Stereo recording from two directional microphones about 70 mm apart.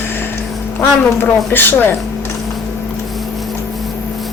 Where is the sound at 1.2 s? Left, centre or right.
Left.